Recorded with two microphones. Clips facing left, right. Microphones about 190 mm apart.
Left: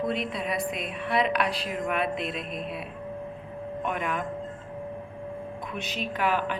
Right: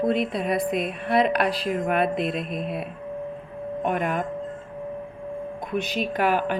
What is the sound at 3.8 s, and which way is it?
Speech, 45° right (ahead or behind).